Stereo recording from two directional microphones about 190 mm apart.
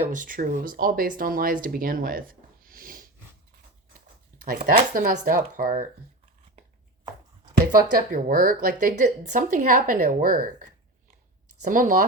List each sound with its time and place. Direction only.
0.0 s speech: 40° right (ahead or behind)
4.4 s a woman's voice: 50° right (ahead or behind)
7.9 s a woman's voice: 50° right (ahead or behind)